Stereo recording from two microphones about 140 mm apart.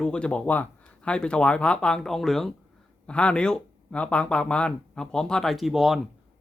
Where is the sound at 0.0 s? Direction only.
5° left (ahead or behind).